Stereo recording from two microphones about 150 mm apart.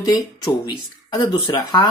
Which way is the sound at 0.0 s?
25° left (ahead or behind).